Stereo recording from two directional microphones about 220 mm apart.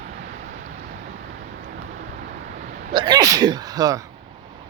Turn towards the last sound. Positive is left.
turn(degrees=-15)  # may be behind; listen again after turning